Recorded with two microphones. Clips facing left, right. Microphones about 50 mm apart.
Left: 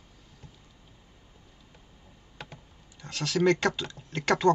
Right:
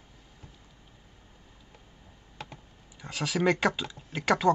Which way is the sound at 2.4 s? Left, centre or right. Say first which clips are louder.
Right 1 dB; centre.